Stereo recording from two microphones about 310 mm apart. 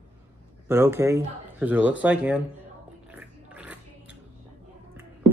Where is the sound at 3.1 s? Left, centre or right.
Centre.